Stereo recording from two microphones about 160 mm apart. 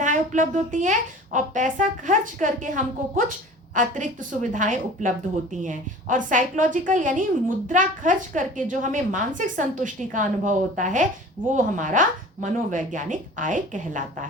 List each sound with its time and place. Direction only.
0.0 s speech: 50° right (ahead or behind)